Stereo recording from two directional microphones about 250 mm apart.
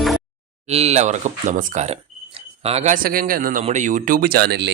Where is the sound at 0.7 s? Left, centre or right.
Right.